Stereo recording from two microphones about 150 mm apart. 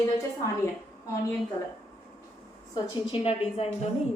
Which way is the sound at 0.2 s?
20° left (ahead or behind).